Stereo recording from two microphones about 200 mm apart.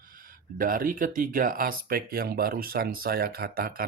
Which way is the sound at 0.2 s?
45° right (ahead or behind).